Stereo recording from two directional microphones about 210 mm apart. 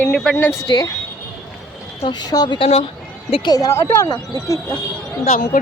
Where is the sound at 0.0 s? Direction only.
5° left (ahead or behind).